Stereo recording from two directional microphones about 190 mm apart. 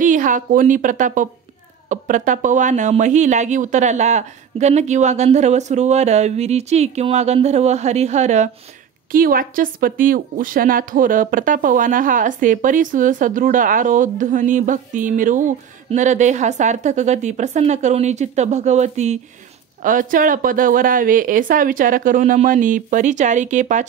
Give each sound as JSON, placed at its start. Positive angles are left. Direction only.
{"t": 0.0, "sound": "a woman's voice", "side_deg": -45}
{"t": 9.1, "sound": "a woman's voice", "side_deg": -50}